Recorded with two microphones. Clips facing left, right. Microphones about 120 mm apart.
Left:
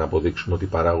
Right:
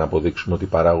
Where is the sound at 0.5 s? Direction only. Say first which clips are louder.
Right 6 dB; 35° right (ahead or behind).